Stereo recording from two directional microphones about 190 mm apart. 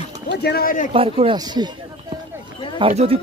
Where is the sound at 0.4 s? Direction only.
55° left (ahead or behind).